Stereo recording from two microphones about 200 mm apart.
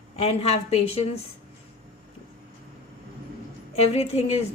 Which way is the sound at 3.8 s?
30° left (ahead or behind).